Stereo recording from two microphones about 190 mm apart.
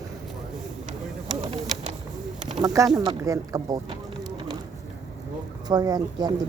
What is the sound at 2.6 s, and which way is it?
Speech, 20° right (ahead or behind).